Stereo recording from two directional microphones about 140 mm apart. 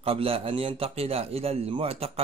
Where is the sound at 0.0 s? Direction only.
40° right (ahead or behind).